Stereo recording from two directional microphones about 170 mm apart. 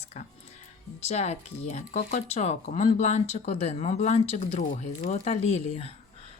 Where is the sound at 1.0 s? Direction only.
40° left (ahead or behind).